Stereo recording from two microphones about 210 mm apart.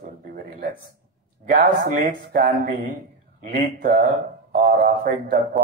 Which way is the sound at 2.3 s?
45° right (ahead or behind).